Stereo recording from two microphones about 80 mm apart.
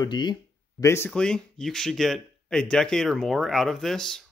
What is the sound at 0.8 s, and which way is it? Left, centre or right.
Speech, left.